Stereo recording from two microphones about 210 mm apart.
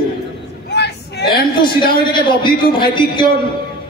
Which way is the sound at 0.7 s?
50° left (ahead or behind).